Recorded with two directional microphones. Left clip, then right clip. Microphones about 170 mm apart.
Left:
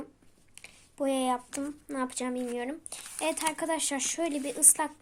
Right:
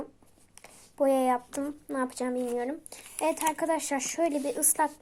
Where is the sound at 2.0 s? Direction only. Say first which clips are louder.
Right 2 dB; 10° left (ahead or behind).